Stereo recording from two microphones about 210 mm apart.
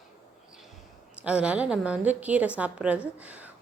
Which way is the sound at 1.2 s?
5° right (ahead or behind).